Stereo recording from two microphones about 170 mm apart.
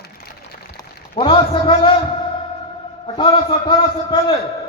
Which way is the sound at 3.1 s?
30° left (ahead or behind).